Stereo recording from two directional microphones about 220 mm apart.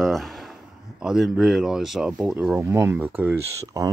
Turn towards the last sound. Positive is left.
turn(degrees=-10)  # may be behind; listen again after turning